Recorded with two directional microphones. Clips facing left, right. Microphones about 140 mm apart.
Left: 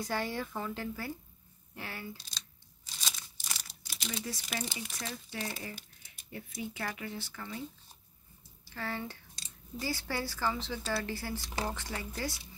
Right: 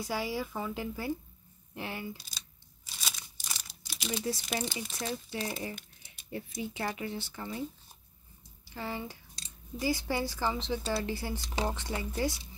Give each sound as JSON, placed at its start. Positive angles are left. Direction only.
{"t": 0.0, "sound": "speech", "side_deg": -10}
{"t": 2.1, "sound": "a sound", "side_deg": -10}
{"t": 4.1, "sound": "speech", "side_deg": -25}
{"t": 8.6, "sound": "speech", "side_deg": -15}